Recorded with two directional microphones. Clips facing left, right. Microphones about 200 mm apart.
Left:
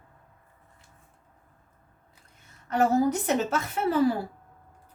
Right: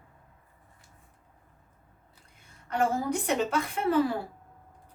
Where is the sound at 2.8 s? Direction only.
40° left (ahead or behind).